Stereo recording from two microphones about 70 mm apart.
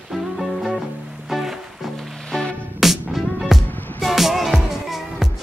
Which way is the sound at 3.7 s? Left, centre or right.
Left.